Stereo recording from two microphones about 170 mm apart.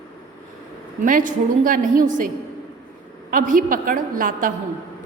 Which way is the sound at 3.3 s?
50° right (ahead or behind).